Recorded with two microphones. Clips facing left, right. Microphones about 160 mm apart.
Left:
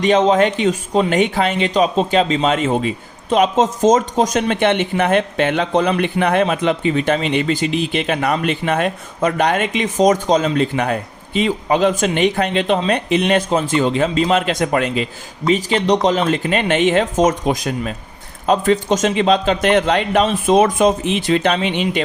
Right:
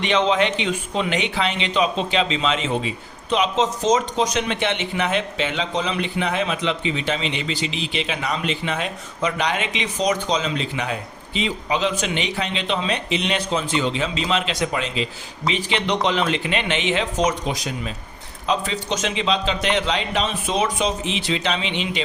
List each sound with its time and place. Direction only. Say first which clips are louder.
0.0 s speech: left 6 dB; 45° left (ahead or behind)
15.4 s speech: left 7 dB; 40° left (ahead or behind)